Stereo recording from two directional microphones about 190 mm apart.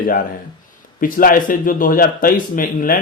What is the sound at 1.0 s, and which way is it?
Speech, 45° left (ahead or behind).